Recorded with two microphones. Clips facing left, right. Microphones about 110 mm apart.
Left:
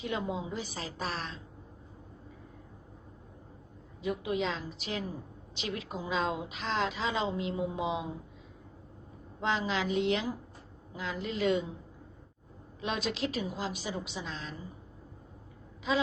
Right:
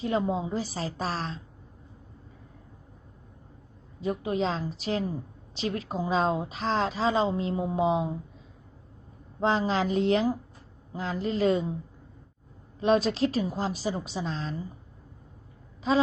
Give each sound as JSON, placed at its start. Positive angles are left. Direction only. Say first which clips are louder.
{"t": 0.0, "sound": "a woman's voice", "louder": "right 7 dB", "side_deg": -35}
{"t": 4.0, "sound": "a woman's voice", "louder": "right 4 dB", "side_deg": -40}
{"t": 9.4, "sound": "a woman's voice", "louder": "right 6 dB", "side_deg": -35}
{"t": 12.8, "sound": "a woman's voice", "louder": "right 10 dB", "side_deg": -40}
{"t": 15.9, "sound": "a woman's voice", "louder": "right 6 dB", "side_deg": -35}